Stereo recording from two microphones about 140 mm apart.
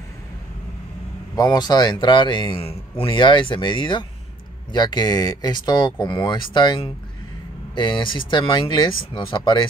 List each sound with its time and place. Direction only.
1.3 s speech: 30° left (ahead or behind)